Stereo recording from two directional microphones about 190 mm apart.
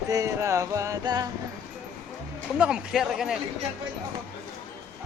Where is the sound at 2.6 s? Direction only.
5° right (ahead or behind).